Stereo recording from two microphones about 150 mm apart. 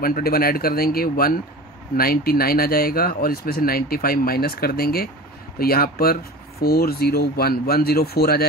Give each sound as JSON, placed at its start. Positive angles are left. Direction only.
{"t": 0.0, "sound": "speech", "side_deg": 85}